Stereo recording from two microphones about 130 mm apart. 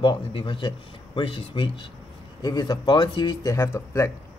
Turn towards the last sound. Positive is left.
turn(degrees=20)  # may be behind; listen again after turning